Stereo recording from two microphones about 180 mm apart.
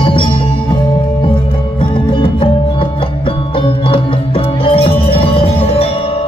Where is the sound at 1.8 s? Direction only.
30° left (ahead or behind).